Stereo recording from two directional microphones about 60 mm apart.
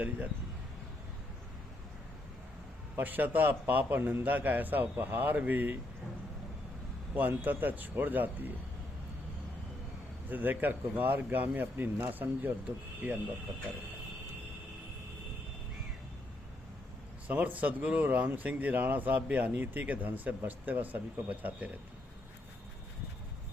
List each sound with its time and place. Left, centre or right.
2.9 s speech: right
7.2 s speech: right
10.2 s speech: right
17.2 s speech: right